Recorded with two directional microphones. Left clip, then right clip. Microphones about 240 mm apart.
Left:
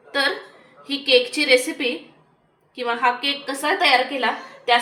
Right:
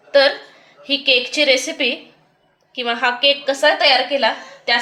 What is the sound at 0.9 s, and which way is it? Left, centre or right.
A woman's voice, right.